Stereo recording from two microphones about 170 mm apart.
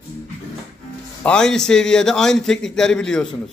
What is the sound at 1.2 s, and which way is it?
A man's voice, 5° left (ahead or behind).